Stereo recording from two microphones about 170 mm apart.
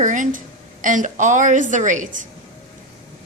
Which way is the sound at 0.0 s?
50° right (ahead or behind).